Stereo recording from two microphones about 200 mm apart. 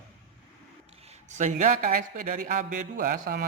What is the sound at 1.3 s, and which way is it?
A man's voice, 40° right (ahead or behind).